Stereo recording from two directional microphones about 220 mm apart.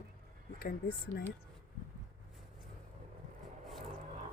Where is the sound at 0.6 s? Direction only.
45° left (ahead or behind).